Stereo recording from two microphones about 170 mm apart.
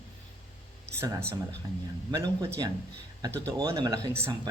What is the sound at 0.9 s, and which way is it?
Speech, 15° right (ahead or behind).